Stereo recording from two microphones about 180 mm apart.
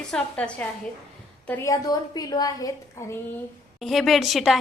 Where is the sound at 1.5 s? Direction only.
20° left (ahead or behind).